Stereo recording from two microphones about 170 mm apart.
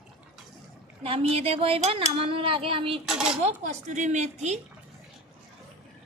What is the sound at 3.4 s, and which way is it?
Speech, 45° right (ahead or behind).